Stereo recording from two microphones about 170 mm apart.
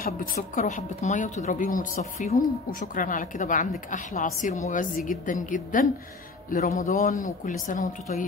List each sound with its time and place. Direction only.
0.4 s a woman's voice: 50° left (ahead or behind)